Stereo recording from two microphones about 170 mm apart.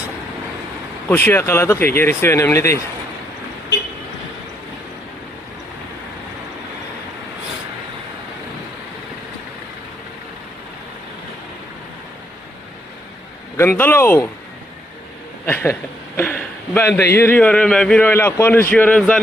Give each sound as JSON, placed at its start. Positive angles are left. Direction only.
{"t": 1.0, "sound": "a man's voice", "side_deg": 10}
{"t": 13.6, "sound": "a man's voice", "side_deg": 10}
{"t": 15.4, "sound": "a man's voice", "side_deg": 10}